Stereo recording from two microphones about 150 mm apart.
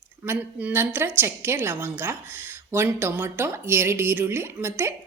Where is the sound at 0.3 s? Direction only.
15° right (ahead or behind).